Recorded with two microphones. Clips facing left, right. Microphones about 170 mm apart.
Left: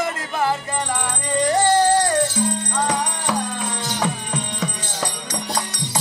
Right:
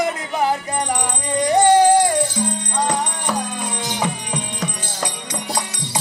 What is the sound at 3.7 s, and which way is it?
Music, 15° right (ahead or behind).